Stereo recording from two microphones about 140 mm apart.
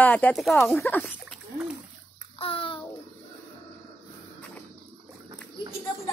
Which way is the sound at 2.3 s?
40° left (ahead or behind).